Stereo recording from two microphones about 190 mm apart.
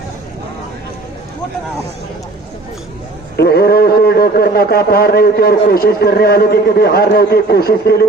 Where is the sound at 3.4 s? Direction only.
55° left (ahead or behind).